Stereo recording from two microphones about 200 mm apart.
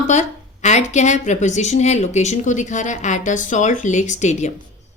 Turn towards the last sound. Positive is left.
turn(degrees=35)  # may be behind; listen again after turning